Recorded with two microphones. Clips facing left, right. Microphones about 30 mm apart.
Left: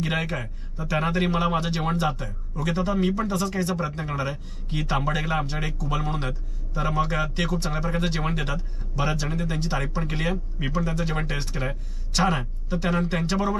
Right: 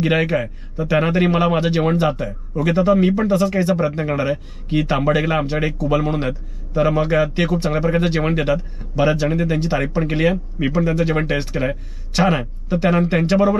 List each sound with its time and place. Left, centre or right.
0.0 s speech: right